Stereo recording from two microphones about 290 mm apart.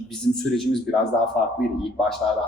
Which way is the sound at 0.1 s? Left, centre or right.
Centre.